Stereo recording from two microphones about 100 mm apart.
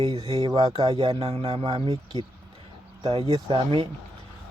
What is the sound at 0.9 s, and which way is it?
Speech, 60° right (ahead or behind).